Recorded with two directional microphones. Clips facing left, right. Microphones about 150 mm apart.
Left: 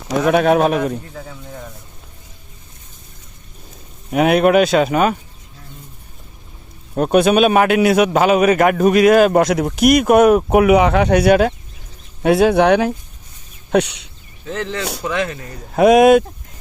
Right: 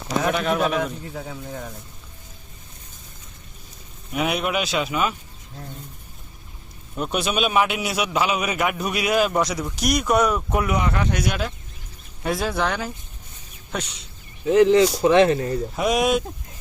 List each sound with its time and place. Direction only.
0.3 s speech: 70° left (ahead or behind)
4.1 s speech: 55° left (ahead or behind)
6.9 s a man's voice: 50° left (ahead or behind); by 14.1 s 65° left (ahead or behind)
14.4 s speech: 15° right (ahead or behind)
15.0 s speech: 30° right (ahead or behind)
15.7 s a man's voice: 55° left (ahead or behind)